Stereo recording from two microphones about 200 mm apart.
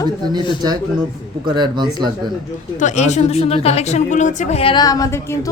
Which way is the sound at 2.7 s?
35° left (ahead or behind).